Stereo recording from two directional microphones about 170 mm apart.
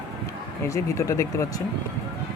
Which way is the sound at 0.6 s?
20° left (ahead or behind).